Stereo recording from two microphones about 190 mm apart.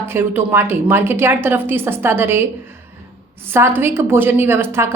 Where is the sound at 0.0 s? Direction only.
10° right (ahead or behind).